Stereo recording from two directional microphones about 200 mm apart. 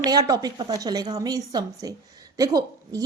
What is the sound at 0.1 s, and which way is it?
A woman's voice, 20° right (ahead or behind).